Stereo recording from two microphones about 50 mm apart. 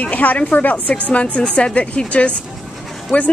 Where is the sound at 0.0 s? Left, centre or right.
Left.